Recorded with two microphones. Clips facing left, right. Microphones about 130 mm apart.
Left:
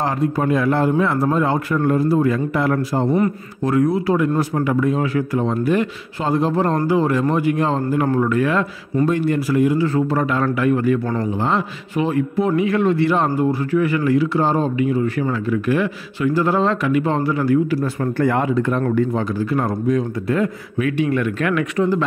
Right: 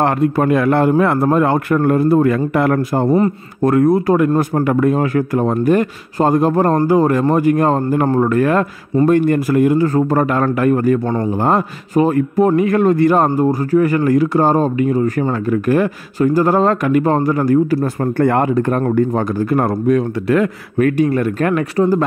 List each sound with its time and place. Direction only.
0.0 s a man's voice: 60° right (ahead or behind); by 17.7 s 45° right (ahead or behind)
18.1 s a man's voice: 55° right (ahead or behind)
20.7 s speech: 45° right (ahead or behind)